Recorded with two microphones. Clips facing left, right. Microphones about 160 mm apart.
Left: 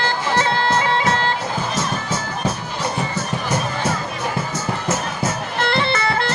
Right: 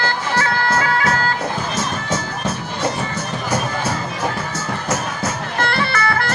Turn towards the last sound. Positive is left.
turn(degrees=20)  # may be behind; listen again after turning